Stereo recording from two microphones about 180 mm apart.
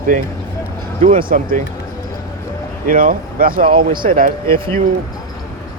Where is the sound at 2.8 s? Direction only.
50° right (ahead or behind).